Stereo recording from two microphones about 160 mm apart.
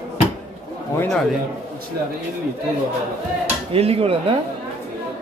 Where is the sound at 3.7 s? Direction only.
40° right (ahead or behind).